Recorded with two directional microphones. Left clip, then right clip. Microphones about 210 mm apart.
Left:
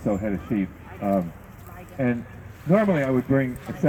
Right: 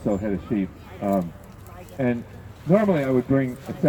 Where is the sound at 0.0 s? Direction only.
45° left (ahead or behind).